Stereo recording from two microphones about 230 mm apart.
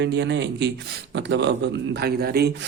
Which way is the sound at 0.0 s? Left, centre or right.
Right.